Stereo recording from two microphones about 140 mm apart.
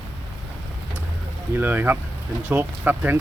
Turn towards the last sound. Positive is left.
turn(degrees=-15)  # may be behind; listen again after turning